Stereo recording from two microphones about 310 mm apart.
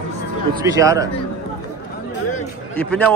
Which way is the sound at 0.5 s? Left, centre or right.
Centre.